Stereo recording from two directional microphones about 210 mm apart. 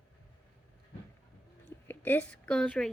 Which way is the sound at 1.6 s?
10° left (ahead or behind).